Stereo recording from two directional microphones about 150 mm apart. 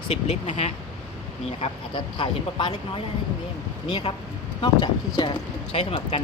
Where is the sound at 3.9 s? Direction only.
35° left (ahead or behind).